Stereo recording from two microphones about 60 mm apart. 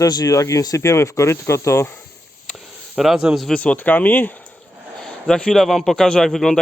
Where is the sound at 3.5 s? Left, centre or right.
Left.